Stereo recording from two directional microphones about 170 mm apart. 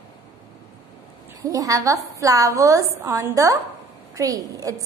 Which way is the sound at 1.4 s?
20° right (ahead or behind).